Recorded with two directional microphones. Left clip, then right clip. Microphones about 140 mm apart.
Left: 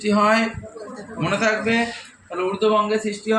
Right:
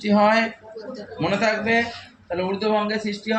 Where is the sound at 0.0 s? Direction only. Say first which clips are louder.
Even; 70° right (ahead or behind).